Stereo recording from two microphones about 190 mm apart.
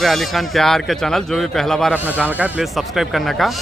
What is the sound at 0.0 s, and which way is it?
Speech, centre (ahead or behind).